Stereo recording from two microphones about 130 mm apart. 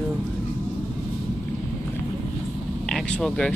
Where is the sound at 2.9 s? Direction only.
5° left (ahead or behind).